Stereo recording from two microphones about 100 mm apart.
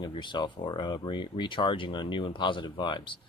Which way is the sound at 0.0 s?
50° left (ahead or behind).